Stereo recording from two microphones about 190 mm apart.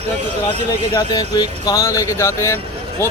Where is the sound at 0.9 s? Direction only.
20° left (ahead or behind).